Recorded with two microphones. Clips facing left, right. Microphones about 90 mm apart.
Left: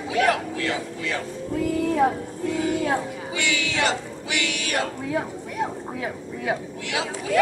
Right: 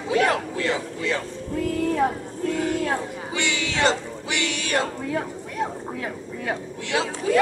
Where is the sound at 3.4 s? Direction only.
30° right (ahead or behind).